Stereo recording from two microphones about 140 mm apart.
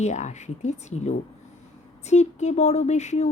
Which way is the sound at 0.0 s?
55° left (ahead or behind).